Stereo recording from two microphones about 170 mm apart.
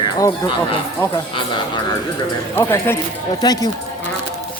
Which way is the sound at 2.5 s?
15° left (ahead or behind).